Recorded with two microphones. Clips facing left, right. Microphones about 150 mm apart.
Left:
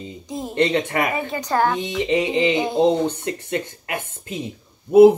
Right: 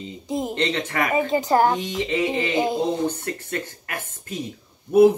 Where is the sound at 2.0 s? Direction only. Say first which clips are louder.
Left 6 dB; 20° left (ahead or behind).